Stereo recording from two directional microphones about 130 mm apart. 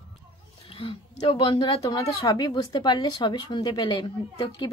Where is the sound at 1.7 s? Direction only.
30° left (ahead or behind).